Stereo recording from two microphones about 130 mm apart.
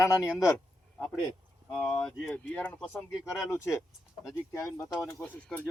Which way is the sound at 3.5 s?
25° left (ahead or behind).